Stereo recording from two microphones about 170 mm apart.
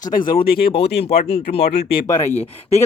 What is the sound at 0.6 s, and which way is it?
Speech, 35° left (ahead or behind).